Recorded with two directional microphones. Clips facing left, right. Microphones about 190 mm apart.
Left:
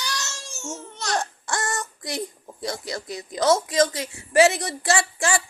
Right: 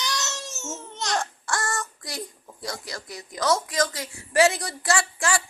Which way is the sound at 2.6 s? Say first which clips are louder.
Left 5 dB; 25° left (ahead or behind).